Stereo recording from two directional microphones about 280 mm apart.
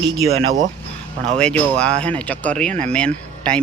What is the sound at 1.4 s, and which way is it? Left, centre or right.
Speech, centre.